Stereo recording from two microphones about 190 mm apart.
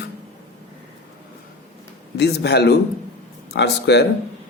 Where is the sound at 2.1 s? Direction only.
60° left (ahead or behind).